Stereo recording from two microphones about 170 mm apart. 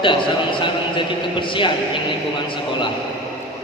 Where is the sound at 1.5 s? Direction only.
30° left (ahead or behind).